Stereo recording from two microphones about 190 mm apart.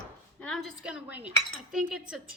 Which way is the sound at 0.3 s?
5° left (ahead or behind).